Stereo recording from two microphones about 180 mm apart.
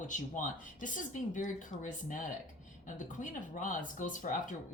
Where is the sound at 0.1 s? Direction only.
45° left (ahead or behind).